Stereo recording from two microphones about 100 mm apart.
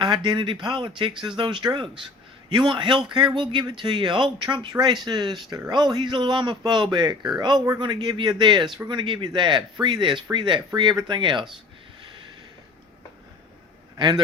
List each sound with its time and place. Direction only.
0.0 s speech: 50° right (ahead or behind)